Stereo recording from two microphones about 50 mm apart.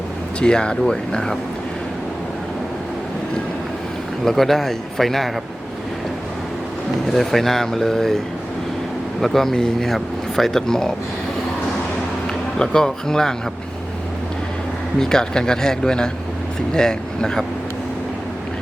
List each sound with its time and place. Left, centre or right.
0.3 s speech: centre
4.3 s a man's voice: centre
7.1 s speech: centre
9.2 s speech: centre
12.5 s speech: centre
14.9 s speech: centre